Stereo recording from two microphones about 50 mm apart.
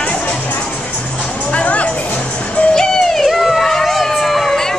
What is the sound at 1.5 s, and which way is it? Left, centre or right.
Music, left.